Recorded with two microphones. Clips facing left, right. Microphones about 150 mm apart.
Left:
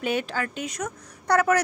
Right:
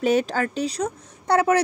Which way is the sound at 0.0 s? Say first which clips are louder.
Right 6 dB; 40° right (ahead or behind).